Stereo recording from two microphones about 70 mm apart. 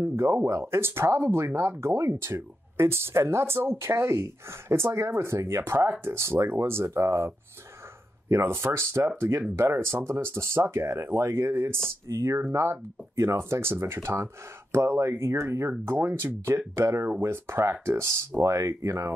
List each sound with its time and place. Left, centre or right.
0.0 s speech: right